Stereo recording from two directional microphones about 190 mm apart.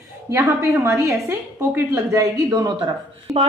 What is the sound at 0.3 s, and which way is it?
A woman's voice, 15° right (ahead or behind).